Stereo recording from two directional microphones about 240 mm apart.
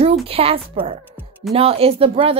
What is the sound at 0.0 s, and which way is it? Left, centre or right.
A woman's voice, right.